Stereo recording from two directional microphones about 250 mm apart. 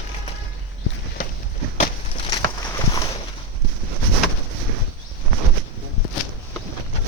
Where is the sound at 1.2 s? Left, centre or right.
Left.